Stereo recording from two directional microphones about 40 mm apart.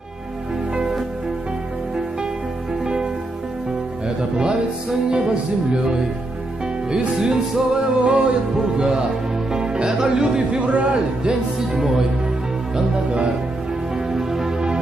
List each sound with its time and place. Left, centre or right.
0.7 s music: centre
2.8 s music: centre
4.2 s music: right
5.1 s speech: right
7.2 s speech: centre
9.5 s music: centre
10.8 s speech: right
13.1 s speech: right
13.9 s music: centre